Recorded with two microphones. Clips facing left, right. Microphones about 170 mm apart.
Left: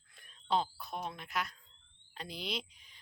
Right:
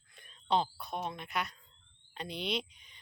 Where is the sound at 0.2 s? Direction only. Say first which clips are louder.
Right 2 dB; centre (ahead or behind).